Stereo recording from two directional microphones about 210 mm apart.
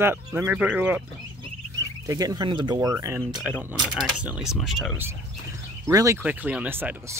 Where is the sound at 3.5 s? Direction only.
5° right (ahead or behind).